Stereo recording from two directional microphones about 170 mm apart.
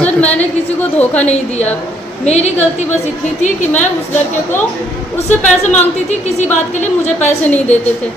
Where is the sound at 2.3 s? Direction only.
40° left (ahead or behind).